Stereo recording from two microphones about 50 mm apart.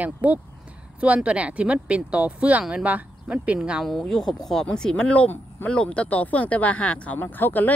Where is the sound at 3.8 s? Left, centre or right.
Centre; by 7.1 s left.